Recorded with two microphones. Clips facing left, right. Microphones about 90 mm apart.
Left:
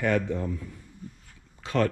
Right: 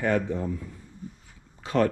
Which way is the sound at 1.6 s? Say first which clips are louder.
Right 2 dB; 25° right (ahead or behind).